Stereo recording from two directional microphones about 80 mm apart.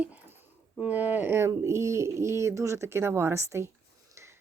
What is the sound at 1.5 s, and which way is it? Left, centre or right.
Speech, right.